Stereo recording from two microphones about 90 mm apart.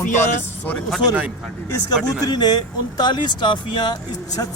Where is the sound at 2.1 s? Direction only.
50° left (ahead or behind).